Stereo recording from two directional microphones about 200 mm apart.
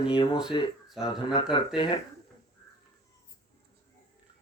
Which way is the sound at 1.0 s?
5° right (ahead or behind).